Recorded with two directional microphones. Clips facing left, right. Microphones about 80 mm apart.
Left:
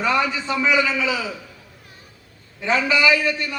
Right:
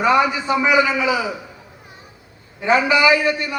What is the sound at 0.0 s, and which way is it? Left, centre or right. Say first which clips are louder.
A man's voice: right 5 dB; centre.